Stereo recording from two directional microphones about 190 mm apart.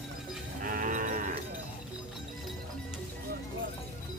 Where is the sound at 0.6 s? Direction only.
45° right (ahead or behind).